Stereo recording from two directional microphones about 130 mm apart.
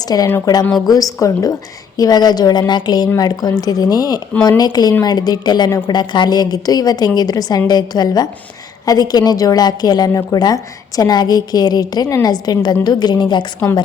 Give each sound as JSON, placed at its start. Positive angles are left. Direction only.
{"t": 0.1, "sound": "a woman's voice", "side_deg": 30}